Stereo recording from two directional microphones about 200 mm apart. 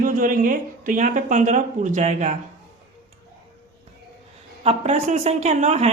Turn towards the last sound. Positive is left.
turn(degrees=-35)  # may be behind; listen again after turning